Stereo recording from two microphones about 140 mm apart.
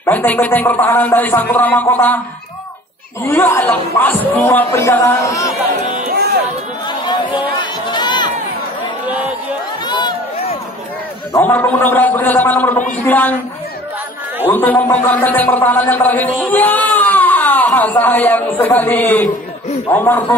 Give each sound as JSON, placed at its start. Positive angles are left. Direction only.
{"t": 0.0, "sound": "a man's voice", "side_deg": 10}
{"t": 3.3, "sound": "a man's voice", "side_deg": 15}
{"t": 5.8, "sound": "music", "side_deg": -65}
{"t": 6.9, "sound": "a sound", "side_deg": 30}
{"t": 7.9, "sound": "run", "side_deg": 30}
{"t": 9.8, "sound": "run", "side_deg": 30}
{"t": 11.3, "sound": "a man's voice", "side_deg": 15}
{"t": 14.5, "sound": "a man's voice", "side_deg": 15}